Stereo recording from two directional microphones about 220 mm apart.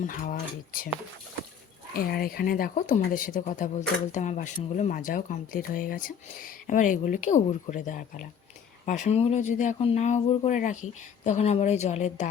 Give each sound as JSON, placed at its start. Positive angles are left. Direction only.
{"t": 0.0, "sound": "speech", "side_deg": 35}
{"t": 1.9, "sound": "speech", "side_deg": 45}